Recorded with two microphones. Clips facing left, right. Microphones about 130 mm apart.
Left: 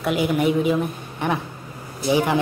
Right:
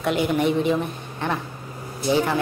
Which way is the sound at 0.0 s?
5° left (ahead or behind).